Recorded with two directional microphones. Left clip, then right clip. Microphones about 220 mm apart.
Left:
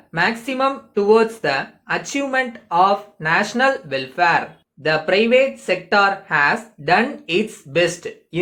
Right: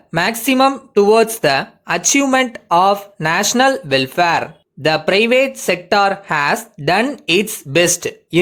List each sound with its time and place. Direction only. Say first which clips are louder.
0.1 s speech: right 4 dB; 50° right (ahead or behind)